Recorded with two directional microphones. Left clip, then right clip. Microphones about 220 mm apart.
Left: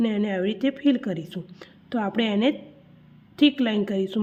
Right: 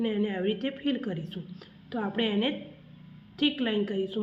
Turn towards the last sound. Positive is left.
turn(degrees=40)  # may be behind; listen again after turning